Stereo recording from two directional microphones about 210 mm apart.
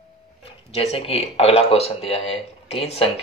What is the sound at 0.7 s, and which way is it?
Speech, 30° left (ahead or behind).